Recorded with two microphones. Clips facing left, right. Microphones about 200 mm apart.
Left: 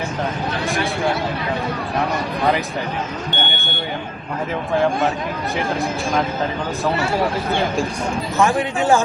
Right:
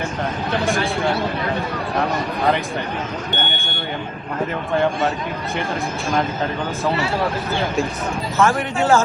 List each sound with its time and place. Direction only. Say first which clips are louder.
8.4 s speech: even; 15° left (ahead or behind)